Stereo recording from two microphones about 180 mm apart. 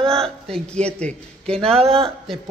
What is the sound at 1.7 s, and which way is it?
Speech, 30° right (ahead or behind).